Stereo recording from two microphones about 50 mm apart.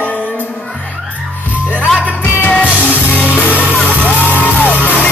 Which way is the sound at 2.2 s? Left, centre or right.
Left.